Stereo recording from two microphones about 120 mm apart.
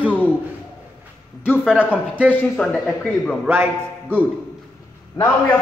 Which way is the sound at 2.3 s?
15° left (ahead or behind).